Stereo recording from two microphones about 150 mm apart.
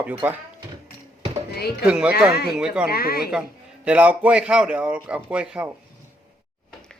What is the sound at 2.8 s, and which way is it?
Speech, 90° left.